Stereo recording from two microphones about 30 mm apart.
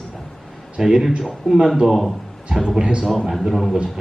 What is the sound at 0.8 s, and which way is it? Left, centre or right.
Speech, centre.